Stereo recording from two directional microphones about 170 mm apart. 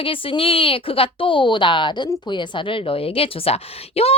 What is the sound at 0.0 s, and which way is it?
A woman's voice, 30° left (ahead or behind).